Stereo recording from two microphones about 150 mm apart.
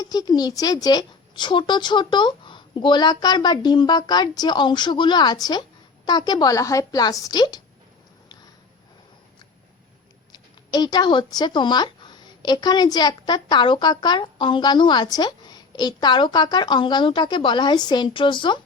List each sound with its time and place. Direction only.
0.0 s speech: 25° left (ahead or behind)
10.3 s speech: 25° left (ahead or behind)